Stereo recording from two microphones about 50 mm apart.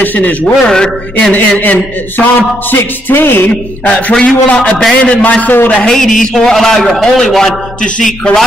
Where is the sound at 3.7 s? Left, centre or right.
Left.